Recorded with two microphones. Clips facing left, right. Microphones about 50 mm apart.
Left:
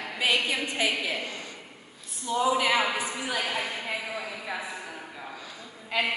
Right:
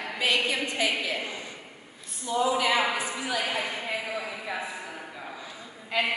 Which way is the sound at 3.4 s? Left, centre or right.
Centre.